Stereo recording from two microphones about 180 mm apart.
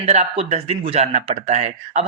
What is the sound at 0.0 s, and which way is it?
Speech, 35° right (ahead or behind).